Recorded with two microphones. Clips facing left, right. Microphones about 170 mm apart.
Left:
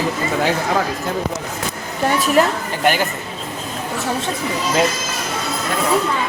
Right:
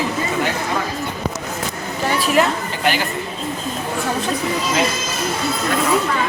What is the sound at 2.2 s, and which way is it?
Speech, 40° left (ahead or behind).